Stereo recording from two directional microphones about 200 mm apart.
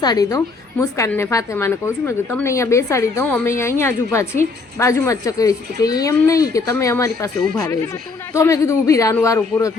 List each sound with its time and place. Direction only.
0.0 s a woman's voice: 20° left (ahead or behind)
8.3 s a woman's voice: 15° left (ahead or behind)